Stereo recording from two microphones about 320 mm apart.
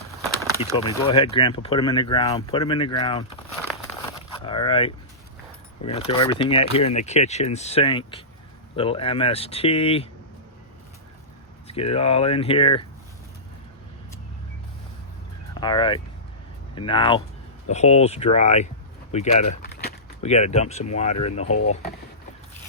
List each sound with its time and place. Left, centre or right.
0.5 s speech: centre
4.4 s a sound: centre
5.8 s speech: centre
11.7 s speech: centre
15.5 s speech: centre